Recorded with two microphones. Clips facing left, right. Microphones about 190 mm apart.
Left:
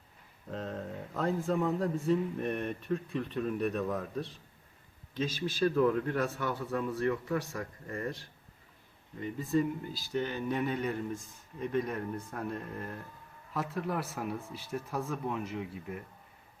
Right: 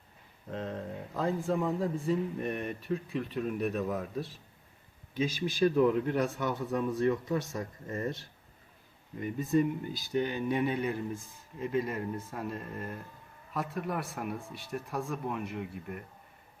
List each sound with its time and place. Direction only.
0.4 s a man's voice: centre (ahead or behind); by 8.3 s 20° right (ahead or behind)
9.4 s speech: 20° right (ahead or behind); by 16.0 s centre (ahead or behind)